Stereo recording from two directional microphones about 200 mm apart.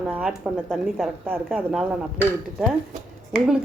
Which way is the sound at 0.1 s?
Centre (ahead or behind).